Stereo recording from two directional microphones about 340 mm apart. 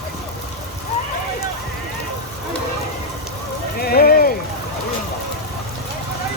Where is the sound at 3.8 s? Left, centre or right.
Left.